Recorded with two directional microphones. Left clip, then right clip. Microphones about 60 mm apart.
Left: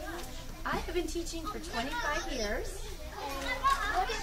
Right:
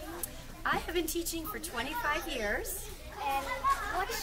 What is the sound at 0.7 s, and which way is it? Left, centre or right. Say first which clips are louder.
Music: right 3 dB; right.